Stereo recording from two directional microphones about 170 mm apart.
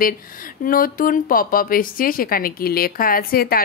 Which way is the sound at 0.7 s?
55° left (ahead or behind).